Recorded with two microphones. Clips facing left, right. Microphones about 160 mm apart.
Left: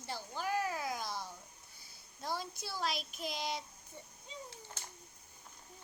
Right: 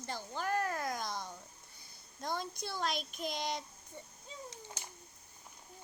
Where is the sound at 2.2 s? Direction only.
5° left (ahead or behind).